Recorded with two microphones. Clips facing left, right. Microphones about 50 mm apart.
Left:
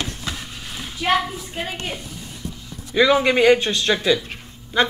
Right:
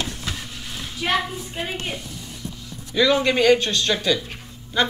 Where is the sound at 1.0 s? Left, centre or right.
Left.